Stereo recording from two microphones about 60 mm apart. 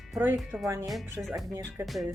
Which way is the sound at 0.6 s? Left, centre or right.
Right.